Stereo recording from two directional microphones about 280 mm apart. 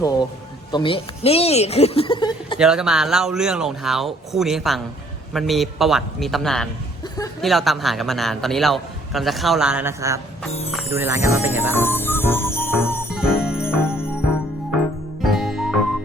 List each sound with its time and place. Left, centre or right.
0.0 s a man's voice: centre
2.6 s a man's voice: centre
11.7 s jingle bell: centre
13.1 s jingle bell: centre
15.2 s music: centre